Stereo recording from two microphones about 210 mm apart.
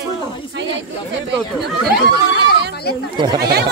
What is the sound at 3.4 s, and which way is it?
Speech, 50° right (ahead or behind).